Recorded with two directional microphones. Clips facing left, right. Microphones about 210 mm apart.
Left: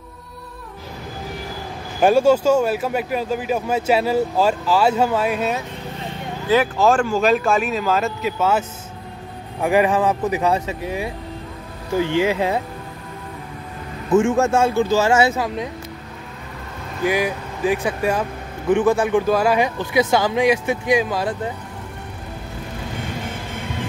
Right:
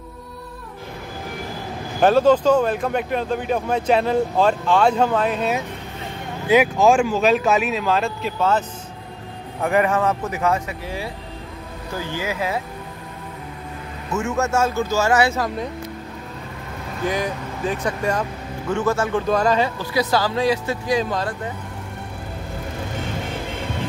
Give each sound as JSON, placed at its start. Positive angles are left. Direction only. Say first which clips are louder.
{"t": 2.0, "sound": "speech", "louder": "even", "side_deg": 10}
{"t": 6.5, "sound": "speech", "louder": "right 1 dB", "side_deg": -10}
{"t": 14.1, "sound": "a man's voice", "louder": "left 6 dB", "side_deg": 30}
{"t": 14.6, "sound": "speech", "louder": "left 4 dB", "side_deg": 15}
{"t": 15.0, "sound": "speech", "louder": "left 2 dB", "side_deg": 25}
{"t": 15.3, "sound": "speech", "louder": "left 1 dB", "side_deg": 5}
{"t": 17.0, "sound": "speech", "louder": "left 3 dB", "side_deg": 10}